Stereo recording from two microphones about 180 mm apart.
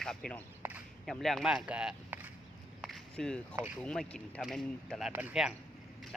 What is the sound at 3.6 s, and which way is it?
Speech, 10° right (ahead or behind).